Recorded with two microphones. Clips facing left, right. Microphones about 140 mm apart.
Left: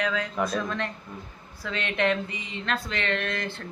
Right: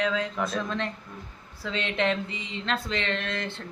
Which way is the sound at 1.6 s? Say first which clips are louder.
Left 1 dB; 25° right (ahead or behind).